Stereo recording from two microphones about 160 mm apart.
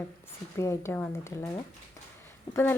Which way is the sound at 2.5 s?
15° left (ahead or behind).